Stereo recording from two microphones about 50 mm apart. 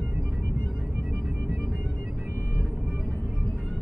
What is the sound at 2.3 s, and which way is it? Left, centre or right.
Vehicle, right.